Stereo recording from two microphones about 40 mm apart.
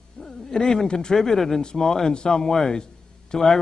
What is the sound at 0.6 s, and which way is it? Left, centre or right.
Speech, centre.